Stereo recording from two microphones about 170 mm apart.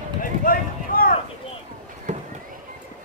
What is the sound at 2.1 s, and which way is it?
Fireworks, 45° right (ahead or behind).